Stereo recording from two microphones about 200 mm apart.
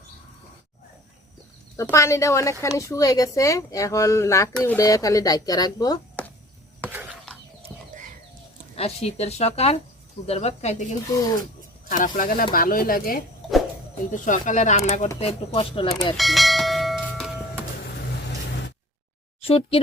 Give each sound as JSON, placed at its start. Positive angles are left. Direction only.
{"t": 1.7, "sound": "speech", "side_deg": 15}
{"t": 6.8, "sound": "a sound", "side_deg": -5}
{"t": 7.9, "sound": "chicken", "side_deg": -40}
{"t": 8.7, "sound": "speech", "side_deg": 30}
{"t": 11.9, "sound": "speech", "side_deg": 40}
{"t": 16.1, "sound": "a sound", "side_deg": 0}
{"t": 19.4, "sound": "speech", "side_deg": 30}